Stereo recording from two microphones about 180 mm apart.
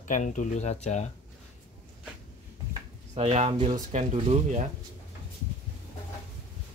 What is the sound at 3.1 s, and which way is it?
Speech, 40° right (ahead or behind).